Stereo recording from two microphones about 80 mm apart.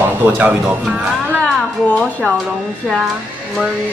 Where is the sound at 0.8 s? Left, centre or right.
Centre.